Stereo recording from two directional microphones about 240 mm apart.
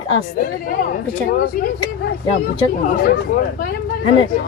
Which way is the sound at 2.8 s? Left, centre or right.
Left.